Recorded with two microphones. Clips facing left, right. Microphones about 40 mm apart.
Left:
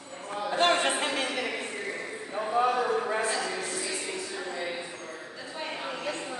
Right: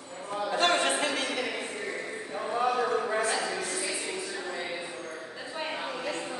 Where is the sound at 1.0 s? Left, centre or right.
Left.